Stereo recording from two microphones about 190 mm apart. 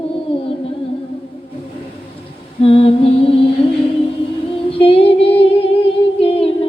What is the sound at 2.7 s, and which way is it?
Music, 30° left (ahead or behind).